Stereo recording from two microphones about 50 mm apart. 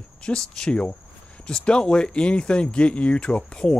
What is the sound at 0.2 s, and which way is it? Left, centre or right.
Speech, centre.